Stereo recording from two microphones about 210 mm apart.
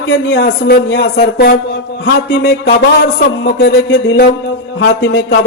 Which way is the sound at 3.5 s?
60° left (ahead or behind).